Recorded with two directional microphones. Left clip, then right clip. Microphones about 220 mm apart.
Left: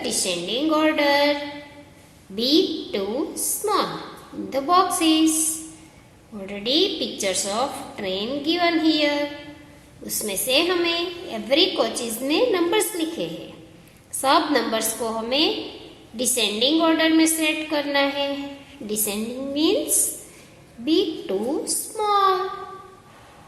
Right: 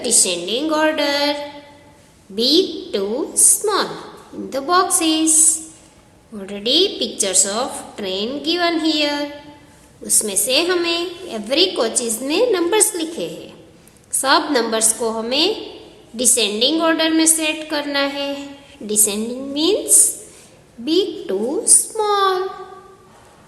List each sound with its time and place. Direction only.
0.0 s a woman's voice: 20° right (ahead or behind)
6.4 s a woman's voice: 20° right (ahead or behind)
20.8 s a woman's voice: 15° right (ahead or behind)